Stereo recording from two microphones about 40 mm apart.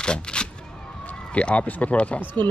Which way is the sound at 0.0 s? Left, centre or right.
Left.